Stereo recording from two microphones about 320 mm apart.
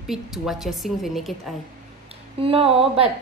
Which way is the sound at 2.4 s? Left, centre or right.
Centre.